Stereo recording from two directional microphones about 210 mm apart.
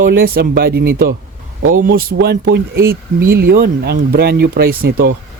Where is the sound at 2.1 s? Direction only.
55° right (ahead or behind).